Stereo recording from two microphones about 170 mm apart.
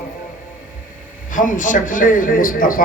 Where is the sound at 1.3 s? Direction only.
50° left (ahead or behind).